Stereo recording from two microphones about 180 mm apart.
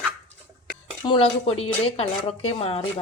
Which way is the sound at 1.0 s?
30° left (ahead or behind).